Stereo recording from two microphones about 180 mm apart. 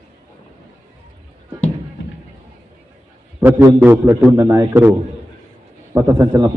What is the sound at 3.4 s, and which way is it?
A man's voice, 10° right (ahead or behind).